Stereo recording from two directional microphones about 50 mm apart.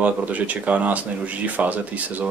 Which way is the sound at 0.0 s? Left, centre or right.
Right.